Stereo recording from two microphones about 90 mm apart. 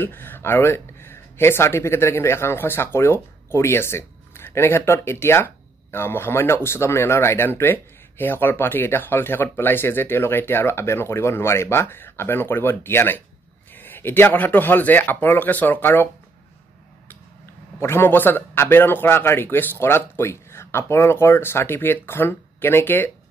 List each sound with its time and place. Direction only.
0.0 s speech: 20° left (ahead or behind)
17.7 s speech: 25° left (ahead or behind)